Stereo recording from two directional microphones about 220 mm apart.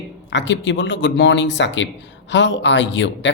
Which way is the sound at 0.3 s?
55° left (ahead or behind).